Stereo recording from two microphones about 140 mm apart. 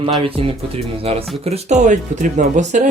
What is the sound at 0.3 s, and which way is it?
Speech, 40° right (ahead or behind).